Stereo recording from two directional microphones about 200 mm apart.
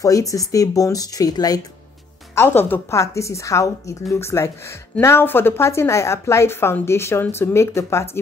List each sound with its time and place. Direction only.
0.0 s a woman's voice: 15° left (ahead or behind)